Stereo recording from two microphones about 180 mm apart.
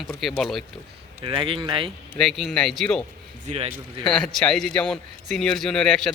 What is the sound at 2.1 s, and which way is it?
Speech, centre (ahead or behind).